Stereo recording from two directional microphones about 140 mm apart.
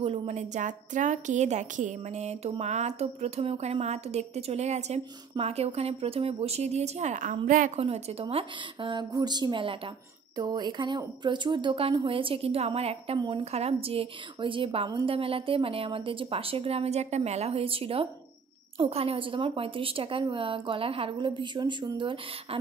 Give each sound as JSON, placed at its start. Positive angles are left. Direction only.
{"t": 0.0, "sound": "a woman's voice", "side_deg": -50}
{"t": 7.8, "sound": "a woman's voice", "side_deg": -45}